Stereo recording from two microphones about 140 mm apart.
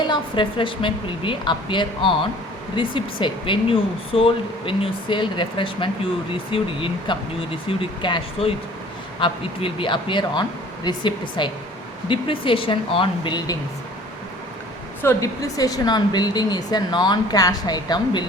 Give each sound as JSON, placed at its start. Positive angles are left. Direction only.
{"t": 0.1, "sound": "speech", "side_deg": 35}
{"t": 15.0, "sound": "speech", "side_deg": 25}